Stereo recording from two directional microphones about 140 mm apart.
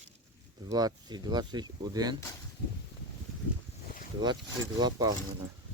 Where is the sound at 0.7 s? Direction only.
25° right (ahead or behind).